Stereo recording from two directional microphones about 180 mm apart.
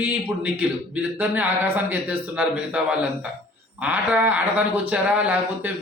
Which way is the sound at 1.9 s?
10° right (ahead or behind).